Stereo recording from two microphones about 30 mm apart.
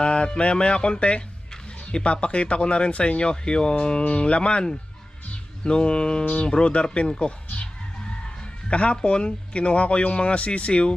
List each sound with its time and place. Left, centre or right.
0.0 s music: left
0.9 s speech: left
1.9 s speech: left
5.6 s speech: left
8.7 s speech: left